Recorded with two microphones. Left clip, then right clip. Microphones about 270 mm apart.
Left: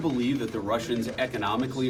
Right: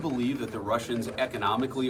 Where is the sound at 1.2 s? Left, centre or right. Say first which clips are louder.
Right 2 dB; centre.